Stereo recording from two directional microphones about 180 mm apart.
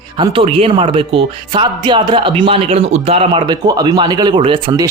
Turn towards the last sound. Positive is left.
turn(degrees=-25)  # may be behind; listen again after turning